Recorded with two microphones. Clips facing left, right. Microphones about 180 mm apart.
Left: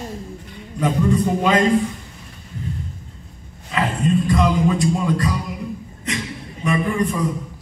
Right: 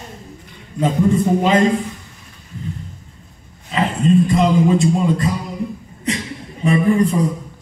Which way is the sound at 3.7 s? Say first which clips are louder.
Right 4 dB; 25° right (ahead or behind).